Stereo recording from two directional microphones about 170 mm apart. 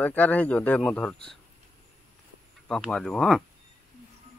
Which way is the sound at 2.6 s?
5° left (ahead or behind).